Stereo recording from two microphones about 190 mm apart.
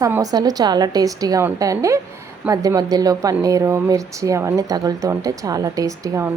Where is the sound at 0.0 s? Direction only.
20° right (ahead or behind).